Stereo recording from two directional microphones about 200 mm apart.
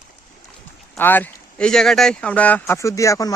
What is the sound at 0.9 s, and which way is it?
Speech, 10° left (ahead or behind).